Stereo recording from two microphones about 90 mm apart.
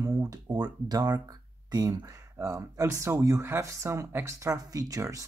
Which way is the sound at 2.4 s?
35° right (ahead or behind).